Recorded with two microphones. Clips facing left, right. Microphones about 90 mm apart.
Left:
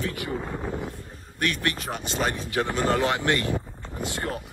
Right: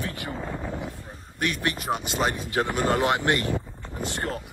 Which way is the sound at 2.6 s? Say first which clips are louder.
Even; 25° right (ahead or behind).